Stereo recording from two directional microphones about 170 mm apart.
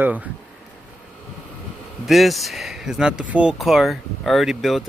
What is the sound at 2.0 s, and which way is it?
Speech, centre (ahead or behind).